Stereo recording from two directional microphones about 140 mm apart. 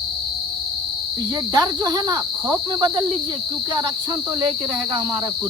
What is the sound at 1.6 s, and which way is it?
Speech, 30° right (ahead or behind).